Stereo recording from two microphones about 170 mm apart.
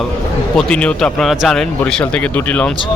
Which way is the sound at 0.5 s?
5° left (ahead or behind).